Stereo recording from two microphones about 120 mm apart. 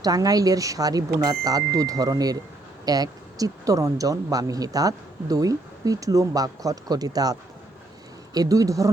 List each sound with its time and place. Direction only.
0.0 s speech: 30° right (ahead or behind)